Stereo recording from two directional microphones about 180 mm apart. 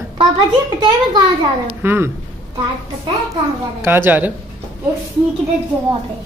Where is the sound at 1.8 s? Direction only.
10° right (ahead or behind).